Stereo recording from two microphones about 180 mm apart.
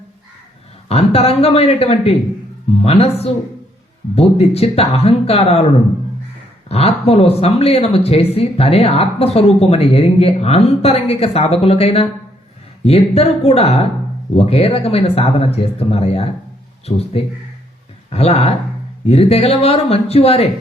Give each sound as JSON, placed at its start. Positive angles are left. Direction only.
{"t": 0.9, "sound": "speech", "side_deg": 35}
{"t": 6.7, "sound": "speech", "side_deg": 35}